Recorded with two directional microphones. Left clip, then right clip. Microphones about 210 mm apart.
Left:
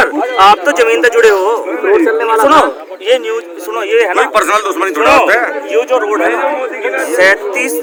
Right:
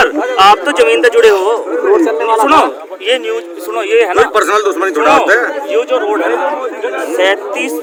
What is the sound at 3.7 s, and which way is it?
Speech, 10° right (ahead or behind).